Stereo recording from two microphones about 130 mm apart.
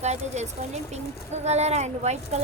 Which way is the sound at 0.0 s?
60° right (ahead or behind).